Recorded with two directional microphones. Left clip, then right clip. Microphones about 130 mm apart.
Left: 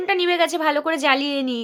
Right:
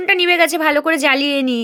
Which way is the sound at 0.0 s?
45° right (ahead or behind).